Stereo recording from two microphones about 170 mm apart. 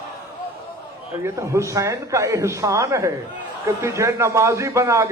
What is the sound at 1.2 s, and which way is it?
A man's voice, 15° right (ahead or behind).